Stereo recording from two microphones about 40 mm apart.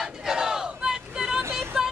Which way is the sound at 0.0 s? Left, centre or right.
Centre.